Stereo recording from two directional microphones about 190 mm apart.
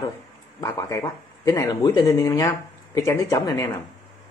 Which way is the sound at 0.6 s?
15° left (ahead or behind).